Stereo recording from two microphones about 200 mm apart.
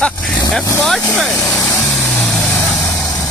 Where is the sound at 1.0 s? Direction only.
15° left (ahead or behind).